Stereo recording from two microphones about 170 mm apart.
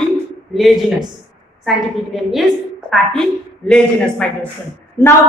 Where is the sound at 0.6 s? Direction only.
Centre (ahead or behind).